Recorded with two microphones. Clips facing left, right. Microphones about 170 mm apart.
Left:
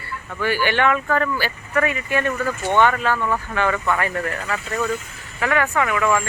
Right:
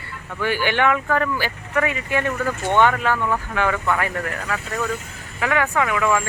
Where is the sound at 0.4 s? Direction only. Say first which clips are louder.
Even; 15° right (ahead or behind).